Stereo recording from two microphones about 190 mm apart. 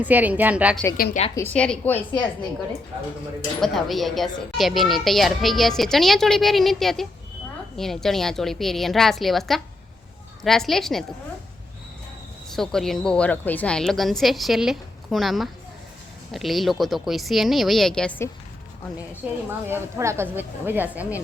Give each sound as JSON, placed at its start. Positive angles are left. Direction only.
{"t": 0.0, "sound": "a woman's voice", "side_deg": -10}
{"t": 0.9, "sound": "a woman's voice", "side_deg": 50}
{"t": 1.4, "sound": "a woman's voice", "side_deg": 10}
{"t": 3.6, "sound": "a child's voice", "side_deg": 0}
{"t": 12.5, "sound": "a child's voice", "side_deg": 0}
{"t": 19.2, "sound": "a woman's voice", "side_deg": -5}